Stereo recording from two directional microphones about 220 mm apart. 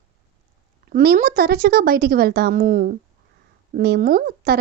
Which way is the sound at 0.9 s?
40° right (ahead or behind).